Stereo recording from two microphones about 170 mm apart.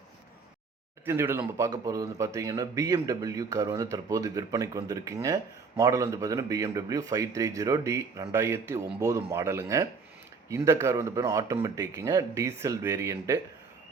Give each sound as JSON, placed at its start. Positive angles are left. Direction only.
{"t": 1.0, "sound": "speech", "side_deg": -15}